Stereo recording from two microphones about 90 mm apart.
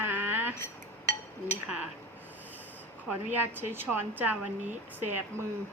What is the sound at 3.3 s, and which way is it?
A woman's voice, 20° right (ahead or behind).